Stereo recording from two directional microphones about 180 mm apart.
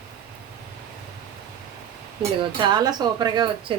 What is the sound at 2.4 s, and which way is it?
A woman's voice, 25° right (ahead or behind).